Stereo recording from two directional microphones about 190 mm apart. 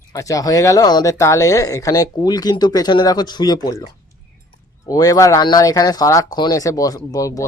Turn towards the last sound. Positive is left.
turn(degrees=15)  # may be behind; listen again after turning